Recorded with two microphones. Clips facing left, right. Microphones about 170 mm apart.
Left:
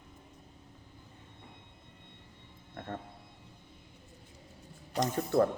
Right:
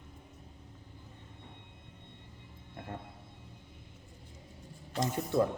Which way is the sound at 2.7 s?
15° right (ahead or behind).